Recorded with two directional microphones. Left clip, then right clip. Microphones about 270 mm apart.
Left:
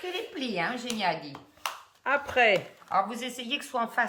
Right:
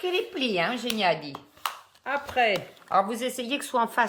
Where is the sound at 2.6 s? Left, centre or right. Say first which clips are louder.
Right 3 dB; right.